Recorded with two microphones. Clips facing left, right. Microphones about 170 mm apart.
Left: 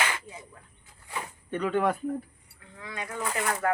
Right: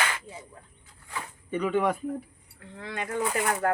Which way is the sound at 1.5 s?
5° right (ahead or behind).